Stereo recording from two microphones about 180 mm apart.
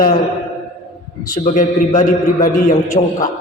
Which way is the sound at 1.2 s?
50° left (ahead or behind).